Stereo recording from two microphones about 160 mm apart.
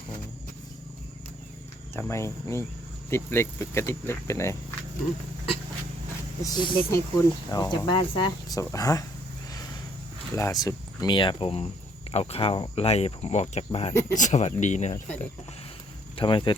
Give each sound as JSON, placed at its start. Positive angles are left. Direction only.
{"t": 2.0, "sound": "speech", "side_deg": 15}
{"t": 6.4, "sound": "speech", "side_deg": 25}
{"t": 10.3, "sound": "speech", "side_deg": 20}
{"t": 16.1, "sound": "speech", "side_deg": 30}